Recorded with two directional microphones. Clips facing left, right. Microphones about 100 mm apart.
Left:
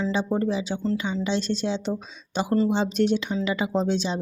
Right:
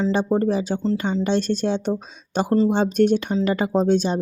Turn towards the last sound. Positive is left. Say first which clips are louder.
# right 5 dB
turn(degrees=-50)  # may be behind; listen again after turning